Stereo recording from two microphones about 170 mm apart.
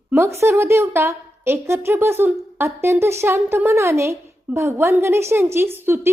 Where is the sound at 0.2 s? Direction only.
15° right (ahead or behind).